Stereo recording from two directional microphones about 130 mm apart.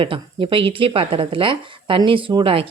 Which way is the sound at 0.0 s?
40° right (ahead or behind).